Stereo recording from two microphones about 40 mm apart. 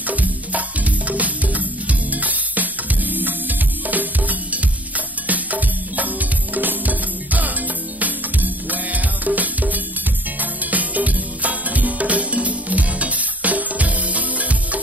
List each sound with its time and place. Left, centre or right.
0.0 s music: right